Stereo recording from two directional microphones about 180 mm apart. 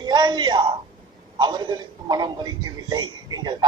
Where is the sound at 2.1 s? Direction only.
25° right (ahead or behind).